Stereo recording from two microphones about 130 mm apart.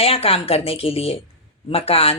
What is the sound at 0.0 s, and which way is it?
Speech, 50° left (ahead or behind).